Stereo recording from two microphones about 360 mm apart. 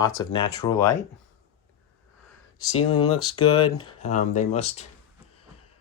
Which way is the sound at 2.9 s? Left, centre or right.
Left.